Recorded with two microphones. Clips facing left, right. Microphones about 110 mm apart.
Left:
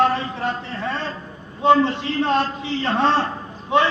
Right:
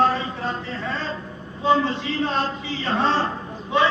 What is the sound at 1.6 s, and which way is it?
Speech, 60° left (ahead or behind).